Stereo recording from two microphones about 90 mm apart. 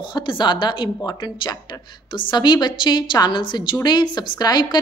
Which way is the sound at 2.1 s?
55° left (ahead or behind).